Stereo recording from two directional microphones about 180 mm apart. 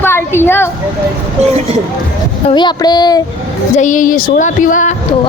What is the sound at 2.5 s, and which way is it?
Child singing, 25° left (ahead or behind).